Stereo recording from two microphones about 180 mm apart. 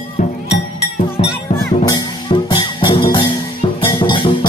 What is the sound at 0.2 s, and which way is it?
Music, 45° left (ahead or behind).